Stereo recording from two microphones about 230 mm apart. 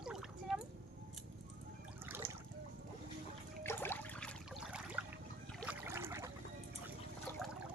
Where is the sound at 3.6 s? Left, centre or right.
Centre.